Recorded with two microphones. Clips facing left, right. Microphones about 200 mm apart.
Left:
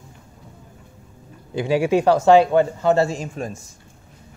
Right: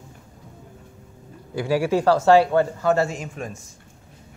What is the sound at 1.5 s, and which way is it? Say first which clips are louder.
A man's voice: left 3 dB; 20° left (ahead or behind).